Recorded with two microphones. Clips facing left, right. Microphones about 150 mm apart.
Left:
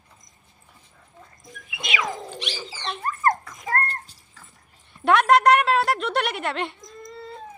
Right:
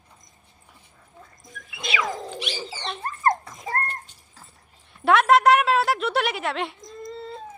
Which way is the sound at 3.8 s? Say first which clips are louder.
Even; 35° left (ahead or behind).